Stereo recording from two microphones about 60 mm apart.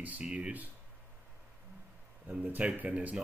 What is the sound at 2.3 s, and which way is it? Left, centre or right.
Speech, right.